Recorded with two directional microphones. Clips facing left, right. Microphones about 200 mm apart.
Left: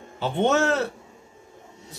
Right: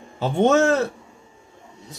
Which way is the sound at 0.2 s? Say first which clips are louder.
Right 4 dB; 45° right (ahead or behind).